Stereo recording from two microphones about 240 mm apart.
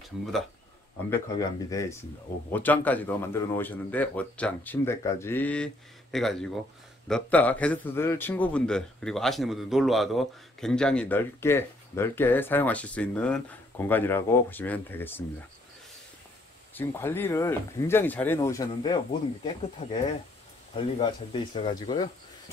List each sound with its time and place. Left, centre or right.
1.4 s a man's voice: centre
16.7 s a man's voice: centre